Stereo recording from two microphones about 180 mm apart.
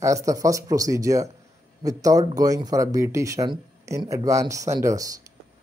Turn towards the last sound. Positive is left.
turn(degrees=-20)  # may be behind; listen again after turning